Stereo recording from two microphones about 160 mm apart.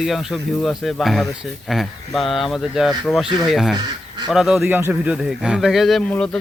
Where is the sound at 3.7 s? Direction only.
30° right (ahead or behind).